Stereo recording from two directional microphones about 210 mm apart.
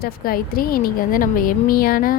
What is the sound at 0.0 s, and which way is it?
A woman's voice, 45° left (ahead or behind).